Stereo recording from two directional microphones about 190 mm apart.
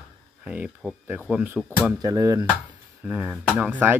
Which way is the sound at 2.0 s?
20° right (ahead or behind).